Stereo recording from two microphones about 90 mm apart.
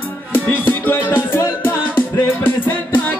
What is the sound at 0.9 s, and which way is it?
Music, 25° left (ahead or behind).